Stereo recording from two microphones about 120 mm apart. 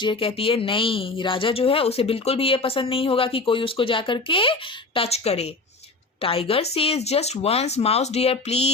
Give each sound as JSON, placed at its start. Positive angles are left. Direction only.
{"t": 0.0, "sound": "speech", "side_deg": 45}
{"t": 4.9, "sound": "speech", "side_deg": 60}